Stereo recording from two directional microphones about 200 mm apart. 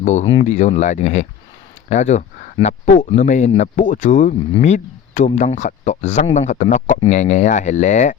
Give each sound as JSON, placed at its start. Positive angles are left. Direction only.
{"t": 0.0, "sound": "speech", "side_deg": 35}